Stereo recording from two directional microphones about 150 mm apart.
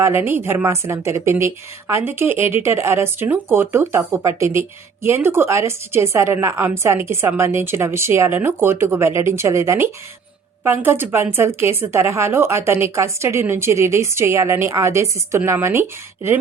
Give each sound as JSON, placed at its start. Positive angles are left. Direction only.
{"t": 0.2, "sound": "a woman's voice", "side_deg": -15}